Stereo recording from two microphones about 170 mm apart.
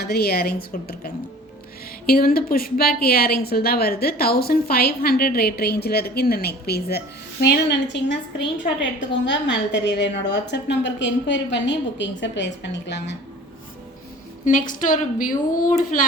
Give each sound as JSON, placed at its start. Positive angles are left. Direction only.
{"t": 0.0, "sound": "a woman's voice", "side_deg": 70}
{"t": 7.4, "sound": "a woman's voice", "side_deg": 80}
{"t": 8.8, "sound": "a woman's voice", "side_deg": 90}
{"t": 14.7, "sound": "a woman's voice", "side_deg": 50}